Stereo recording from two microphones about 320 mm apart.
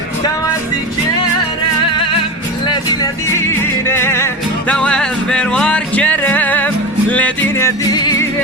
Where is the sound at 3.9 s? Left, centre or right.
Centre.